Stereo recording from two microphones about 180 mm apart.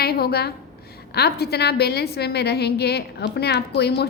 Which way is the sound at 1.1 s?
65° left (ahead or behind).